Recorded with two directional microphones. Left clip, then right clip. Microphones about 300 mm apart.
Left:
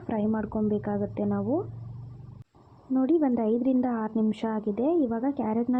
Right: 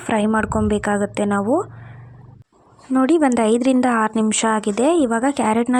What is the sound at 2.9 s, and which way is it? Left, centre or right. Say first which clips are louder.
A woman's voice: right 8 dB; right.